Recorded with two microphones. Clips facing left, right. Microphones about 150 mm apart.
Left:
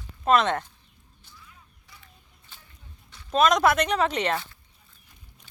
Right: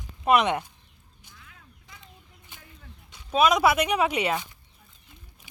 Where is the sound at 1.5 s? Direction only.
90° right.